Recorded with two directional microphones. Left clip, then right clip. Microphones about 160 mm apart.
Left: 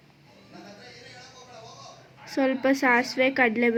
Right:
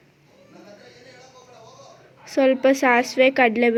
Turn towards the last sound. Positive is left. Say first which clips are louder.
# right 5 dB
turn(degrees=-20)  # may be behind; listen again after turning